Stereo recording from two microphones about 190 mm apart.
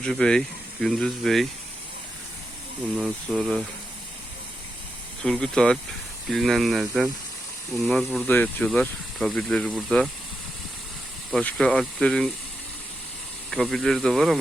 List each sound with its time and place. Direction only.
0.0 s speech: 5° left (ahead or behind)
3.0 s speech: centre (ahead or behind)
5.2 s speech: 5° left (ahead or behind)
11.3 s speech: 5° left (ahead or behind)
13.5 s speech: centre (ahead or behind)